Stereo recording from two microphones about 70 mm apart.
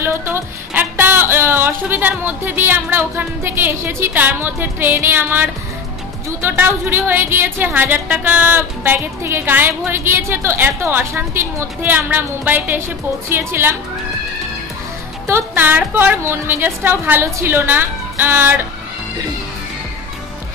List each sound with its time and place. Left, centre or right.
0.0 s a woman's voice: right
15.2 s a woman's voice: right